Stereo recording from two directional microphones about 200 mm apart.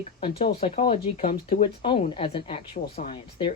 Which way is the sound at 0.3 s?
30° left (ahead or behind).